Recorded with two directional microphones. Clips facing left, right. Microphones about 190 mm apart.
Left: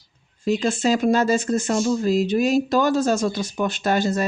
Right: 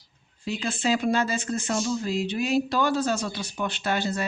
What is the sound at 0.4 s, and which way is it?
Speech, 45° left (ahead or behind).